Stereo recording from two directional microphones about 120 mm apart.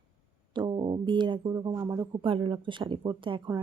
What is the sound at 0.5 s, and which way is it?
Speech, 40° right (ahead or behind).